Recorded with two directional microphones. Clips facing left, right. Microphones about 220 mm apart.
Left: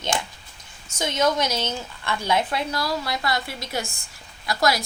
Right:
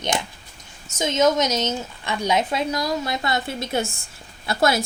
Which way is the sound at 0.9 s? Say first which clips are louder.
Right 4 dB; 20° right (ahead or behind).